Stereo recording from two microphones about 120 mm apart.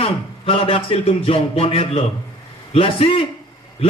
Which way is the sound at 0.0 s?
50° left (ahead or behind).